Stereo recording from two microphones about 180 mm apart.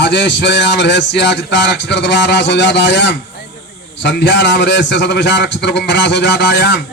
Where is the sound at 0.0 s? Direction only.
80° left.